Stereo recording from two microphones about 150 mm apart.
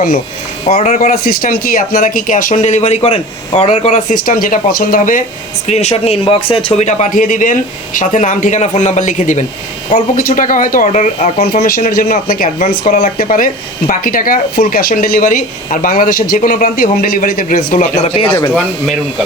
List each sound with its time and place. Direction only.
0.7 s speech: 50° left (ahead or behind)
5.6 s speech: 45° left (ahead or behind)
9.9 s speech: 65° left (ahead or behind); by 11.4 s 50° left (ahead or behind)
11.6 s speech: 75° left (ahead or behind)
12.5 s speech: 55° left (ahead or behind)